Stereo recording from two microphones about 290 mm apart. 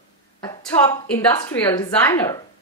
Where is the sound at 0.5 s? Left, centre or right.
Centre.